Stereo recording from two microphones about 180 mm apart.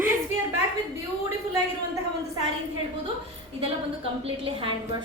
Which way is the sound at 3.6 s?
30° right (ahead or behind).